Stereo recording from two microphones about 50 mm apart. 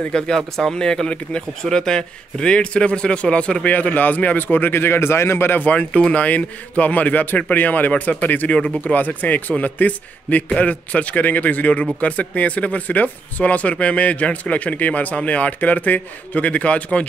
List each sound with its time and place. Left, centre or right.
0.4 s speech: centre
0.7 s speech: centre
3.7 s a man's voice: left
5.6 s a man's voice: left